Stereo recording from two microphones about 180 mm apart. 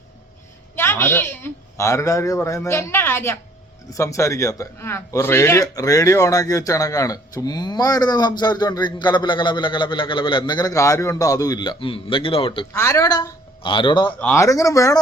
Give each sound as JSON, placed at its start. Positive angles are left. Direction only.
{"t": 0.8, "sound": "a woman's voice", "side_deg": 15}
{"t": 12.7, "sound": "speech", "side_deg": 15}
{"t": 14.2, "sound": "speech", "side_deg": 15}